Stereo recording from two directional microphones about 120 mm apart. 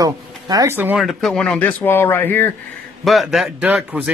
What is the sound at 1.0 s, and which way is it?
Speech, centre (ahead or behind).